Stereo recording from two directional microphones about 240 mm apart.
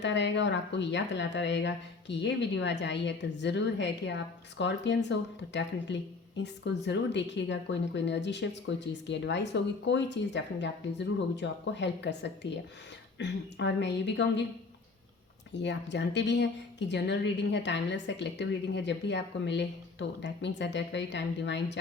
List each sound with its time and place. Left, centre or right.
0.0 s speech: left
15.5 s speech: left